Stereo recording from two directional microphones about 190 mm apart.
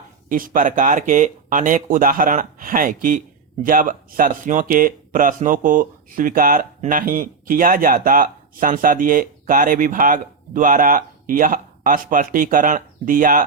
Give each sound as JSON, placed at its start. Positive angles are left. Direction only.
{"t": 0.3, "sound": "speech", "side_deg": -45}